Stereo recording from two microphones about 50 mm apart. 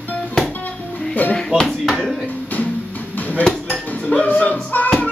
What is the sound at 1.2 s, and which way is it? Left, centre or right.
Music, left.